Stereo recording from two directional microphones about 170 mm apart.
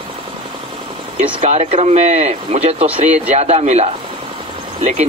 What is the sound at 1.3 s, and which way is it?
Speech, 40° right (ahead or behind).